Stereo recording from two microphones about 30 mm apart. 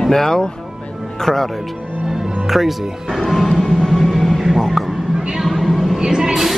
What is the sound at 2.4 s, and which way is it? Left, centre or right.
Speech, centre.